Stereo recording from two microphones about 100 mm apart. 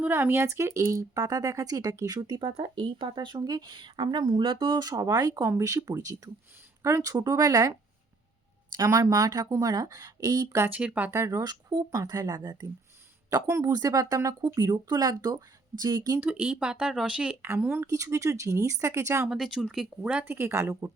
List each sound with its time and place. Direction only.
0.0 s speech: 20° right (ahead or behind); by 3.3 s 50° right (ahead or behind)
3.3 s speech: 40° right (ahead or behind)
8.7 s speech: 35° right (ahead or behind)
10.8 s speech: 15° right (ahead or behind)
11.2 s speech: 35° right (ahead or behind)
13.5 s speech: 35° right (ahead or behind)
16.2 s speech: 15° right (ahead or behind)
17.8 s speech: 35° right (ahead or behind)
19.3 s speech: 5° right (ahead or behind)
20.2 s speech: 25° right (ahead or behind)